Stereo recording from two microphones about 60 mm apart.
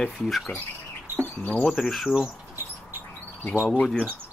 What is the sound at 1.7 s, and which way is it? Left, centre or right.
Speech, centre.